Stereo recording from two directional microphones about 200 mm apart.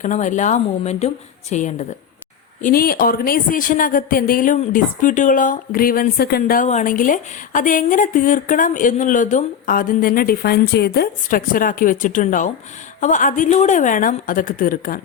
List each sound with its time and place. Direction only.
0.0 s speech: 40° left (ahead or behind)